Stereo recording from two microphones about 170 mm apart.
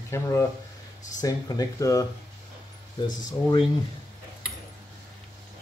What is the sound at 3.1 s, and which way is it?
Speech, 25° left (ahead or behind).